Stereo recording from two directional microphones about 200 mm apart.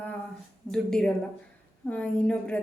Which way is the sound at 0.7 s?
5° left (ahead or behind).